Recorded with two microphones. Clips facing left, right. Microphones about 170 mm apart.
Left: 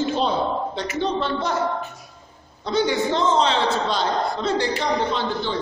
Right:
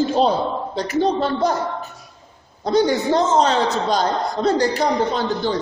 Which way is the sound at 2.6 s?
40° right (ahead or behind).